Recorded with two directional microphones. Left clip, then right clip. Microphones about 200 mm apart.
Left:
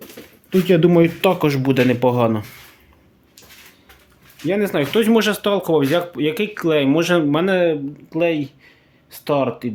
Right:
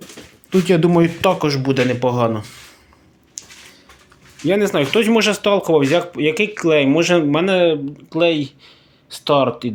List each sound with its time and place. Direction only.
0.5 s speech: 10° left (ahead or behind)
4.4 s speech: centre (ahead or behind)